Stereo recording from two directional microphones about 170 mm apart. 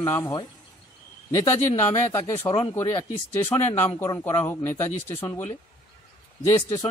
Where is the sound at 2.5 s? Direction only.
35° left (ahead or behind).